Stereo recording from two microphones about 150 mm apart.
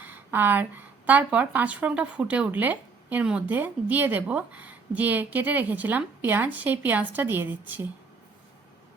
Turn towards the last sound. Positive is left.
turn(degrees=-10)  # may be behind; listen again after turning